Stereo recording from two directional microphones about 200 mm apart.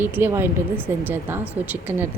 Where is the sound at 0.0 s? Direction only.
10° right (ahead or behind).